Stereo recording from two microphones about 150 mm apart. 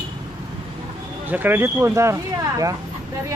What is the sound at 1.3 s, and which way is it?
Speech, 15° right (ahead or behind).